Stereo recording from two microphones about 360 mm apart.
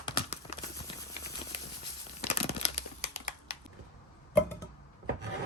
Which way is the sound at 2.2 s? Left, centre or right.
Centre.